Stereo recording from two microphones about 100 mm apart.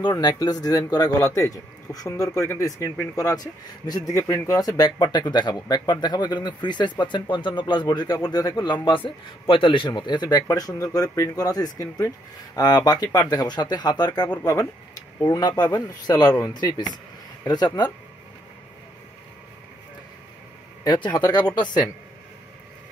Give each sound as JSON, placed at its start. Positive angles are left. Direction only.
{"t": 0.0, "sound": "speech", "side_deg": 45}
{"t": 4.1, "sound": "speech", "side_deg": 25}
{"t": 4.6, "sound": "speech", "side_deg": 40}
{"t": 10.5, "sound": "speech", "side_deg": 35}
{"t": 20.8, "sound": "speech", "side_deg": 45}